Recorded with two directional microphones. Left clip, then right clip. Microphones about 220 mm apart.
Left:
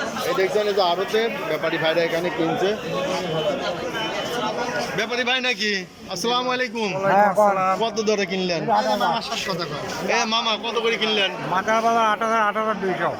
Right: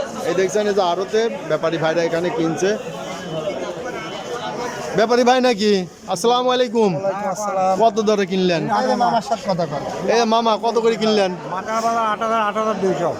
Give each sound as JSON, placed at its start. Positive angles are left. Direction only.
{"t": 0.3, "sound": "speech", "side_deg": -10}
{"t": 4.9, "sound": "a man's voice", "side_deg": -25}
{"t": 7.2, "sound": "speech", "side_deg": 30}
{"t": 7.6, "sound": "speech", "side_deg": -15}
{"t": 9.1, "sound": "speech", "side_deg": -35}
{"t": 10.2, "sound": "a man's voice", "side_deg": -20}
{"t": 11.5, "sound": "a man's voice", "side_deg": 0}